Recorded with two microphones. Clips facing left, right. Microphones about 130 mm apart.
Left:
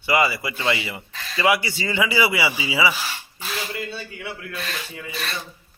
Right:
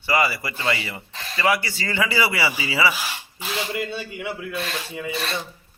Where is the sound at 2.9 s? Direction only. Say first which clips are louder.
Even; 10° right (ahead or behind).